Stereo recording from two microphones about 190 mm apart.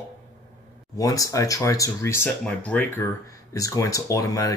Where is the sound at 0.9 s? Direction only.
20° left (ahead or behind).